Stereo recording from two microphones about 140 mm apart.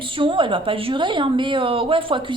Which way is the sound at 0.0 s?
35° right (ahead or behind).